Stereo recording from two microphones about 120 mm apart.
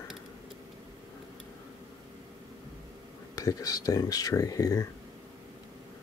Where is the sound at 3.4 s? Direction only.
30° left (ahead or behind).